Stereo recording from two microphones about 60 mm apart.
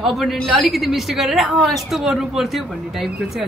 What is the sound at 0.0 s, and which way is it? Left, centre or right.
A woman's voice, centre.